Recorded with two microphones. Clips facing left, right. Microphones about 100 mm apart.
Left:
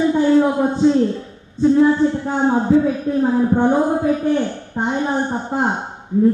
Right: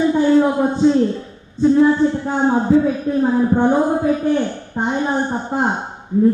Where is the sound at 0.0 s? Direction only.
25° right (ahead or behind).